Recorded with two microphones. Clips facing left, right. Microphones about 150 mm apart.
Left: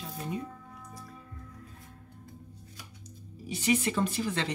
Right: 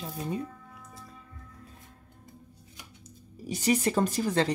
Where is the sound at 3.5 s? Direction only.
40° right (ahead or behind).